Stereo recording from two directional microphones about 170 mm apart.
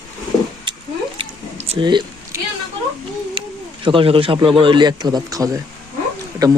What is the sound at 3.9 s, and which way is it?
Speech, 30° right (ahead or behind).